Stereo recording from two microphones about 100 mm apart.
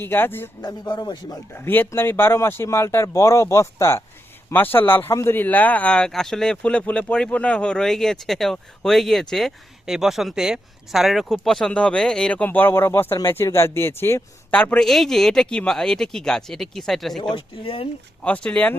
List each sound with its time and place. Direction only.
0.0 s speech: 20° left (ahead or behind)
0.6 s speech: 45° left (ahead or behind)
1.5 s speech: 20° left (ahead or behind)
14.6 s speech: 10° left (ahead or behind)
17.3 s speech: 60° left (ahead or behind)
18.2 s speech: 15° left (ahead or behind)